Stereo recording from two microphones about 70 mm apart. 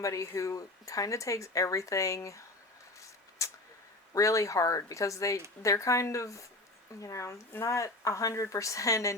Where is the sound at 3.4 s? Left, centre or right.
Left.